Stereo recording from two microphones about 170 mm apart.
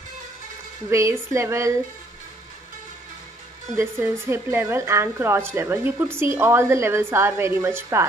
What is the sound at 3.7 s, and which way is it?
Speech, 15° right (ahead or behind).